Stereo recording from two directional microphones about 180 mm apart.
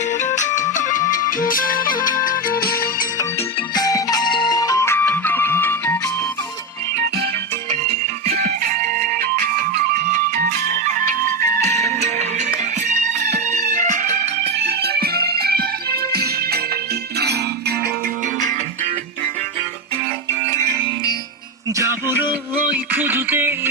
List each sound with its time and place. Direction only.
0.1 s music: 40° left (ahead or behind)
3.8 s music: 20° left (ahead or behind)
8.3 s music: 60° right (ahead or behind)
11.2 s music: 15° left (ahead or behind)
11.6 s music: 40° right (ahead or behind)
14.7 s music: 60° right (ahead or behind)
22.9 s music: 10° right (ahead or behind)